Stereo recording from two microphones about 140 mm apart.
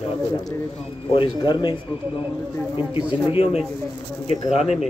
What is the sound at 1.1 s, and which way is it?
Speech, 35° left (ahead or behind).